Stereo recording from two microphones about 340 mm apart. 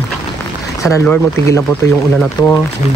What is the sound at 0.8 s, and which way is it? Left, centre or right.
Speech, centre.